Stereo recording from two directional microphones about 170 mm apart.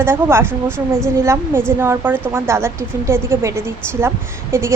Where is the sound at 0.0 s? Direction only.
15° right (ahead or behind).